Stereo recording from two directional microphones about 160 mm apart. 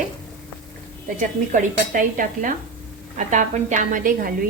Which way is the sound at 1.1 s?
55° right (ahead or behind).